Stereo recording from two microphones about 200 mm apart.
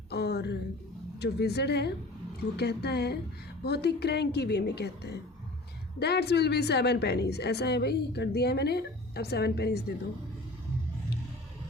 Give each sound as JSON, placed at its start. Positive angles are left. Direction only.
{"t": 0.1, "sound": "a woman's voice", "side_deg": 55}